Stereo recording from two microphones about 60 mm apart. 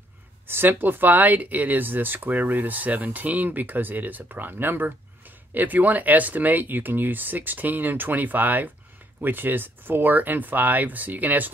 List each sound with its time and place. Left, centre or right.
0.5 s speech: right